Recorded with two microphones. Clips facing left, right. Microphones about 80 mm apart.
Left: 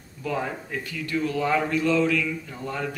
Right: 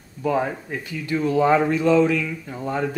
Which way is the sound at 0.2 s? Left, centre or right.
Right.